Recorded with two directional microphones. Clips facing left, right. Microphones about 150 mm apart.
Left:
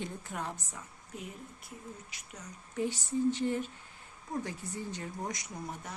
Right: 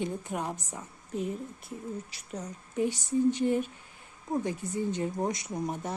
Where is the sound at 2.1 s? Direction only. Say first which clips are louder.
Right 1 dB; 35° right (ahead or behind).